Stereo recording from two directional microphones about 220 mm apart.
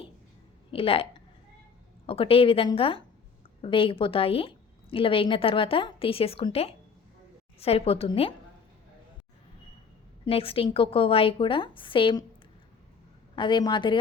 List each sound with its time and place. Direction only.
0.7 s a woman's voice: 25° left (ahead or behind)
2.0 s a woman's voice: 25° left (ahead or behind)
10.2 s a woman's voice: 25° left (ahead or behind)
13.3 s a woman's voice: 20° left (ahead or behind)